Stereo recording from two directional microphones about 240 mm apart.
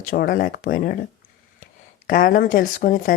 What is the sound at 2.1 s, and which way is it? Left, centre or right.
Speech, left.